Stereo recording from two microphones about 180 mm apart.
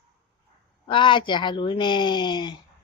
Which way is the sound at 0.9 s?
25° left (ahead or behind).